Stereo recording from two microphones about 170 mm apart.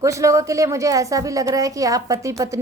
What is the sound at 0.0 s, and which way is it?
Speech, 20° right (ahead or behind).